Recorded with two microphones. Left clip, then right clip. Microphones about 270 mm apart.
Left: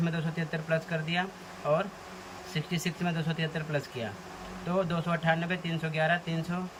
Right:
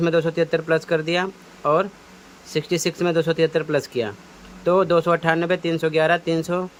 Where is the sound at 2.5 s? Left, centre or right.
Centre.